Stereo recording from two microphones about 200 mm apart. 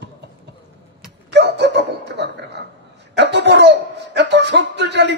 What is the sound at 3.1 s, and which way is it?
Speech, 60° right (ahead or behind).